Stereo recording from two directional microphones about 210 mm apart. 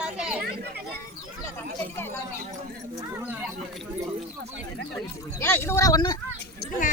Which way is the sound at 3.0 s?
15° right (ahead or behind).